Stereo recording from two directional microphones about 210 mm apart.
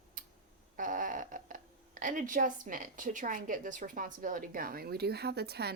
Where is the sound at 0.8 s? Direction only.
40° right (ahead or behind).